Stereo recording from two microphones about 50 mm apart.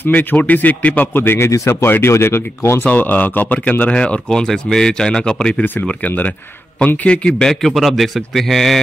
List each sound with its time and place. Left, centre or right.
0.0 s speech: left
1.1 s a man's voice: left
1.5 s speech: left
2.8 s speech: left; by 5.6 s centre
5.6 s speech: left
7.0 s a man's voice: left
7.6 s a man's voice: centre